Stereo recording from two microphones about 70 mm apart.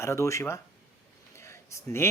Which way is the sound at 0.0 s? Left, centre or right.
Left.